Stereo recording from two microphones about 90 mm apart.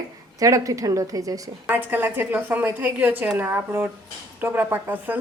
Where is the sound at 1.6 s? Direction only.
20° right (ahead or behind).